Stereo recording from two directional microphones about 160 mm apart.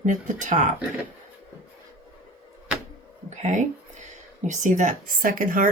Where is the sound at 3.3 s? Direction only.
50° right (ahead or behind).